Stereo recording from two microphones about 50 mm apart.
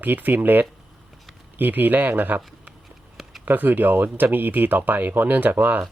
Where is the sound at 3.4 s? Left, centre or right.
Right.